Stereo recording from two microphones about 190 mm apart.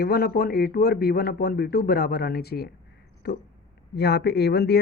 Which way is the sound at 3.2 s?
60° left (ahead or behind).